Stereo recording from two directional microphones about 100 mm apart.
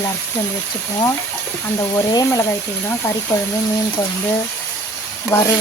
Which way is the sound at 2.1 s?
35° left (ahead or behind).